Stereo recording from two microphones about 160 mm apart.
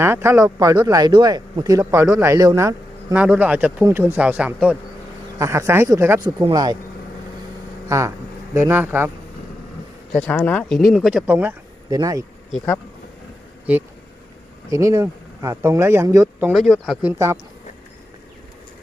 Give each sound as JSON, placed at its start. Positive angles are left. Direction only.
{"t": 0.0, "sound": "a man's voice", "side_deg": -15}
{"t": 7.9, "sound": "speech", "side_deg": -20}
{"t": 10.1, "sound": "speech", "side_deg": 10}
{"t": 11.9, "sound": "speech", "side_deg": -20}
{"t": 13.7, "sound": "speech", "side_deg": -10}
{"t": 16.5, "sound": "speech", "side_deg": 0}